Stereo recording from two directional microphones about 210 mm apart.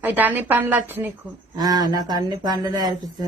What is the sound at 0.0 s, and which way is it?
Speech, 10° right (ahead or behind).